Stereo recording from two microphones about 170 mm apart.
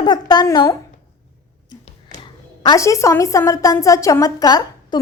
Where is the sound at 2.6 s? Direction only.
20° left (ahead or behind).